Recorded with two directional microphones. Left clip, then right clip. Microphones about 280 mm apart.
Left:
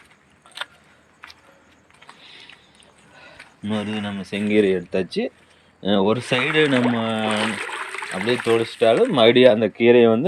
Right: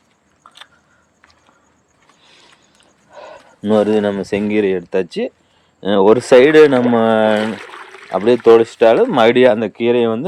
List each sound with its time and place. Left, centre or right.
3.2 s a sound: centre
3.7 s speech: right
4.0 s speech: centre
4.4 s speech: centre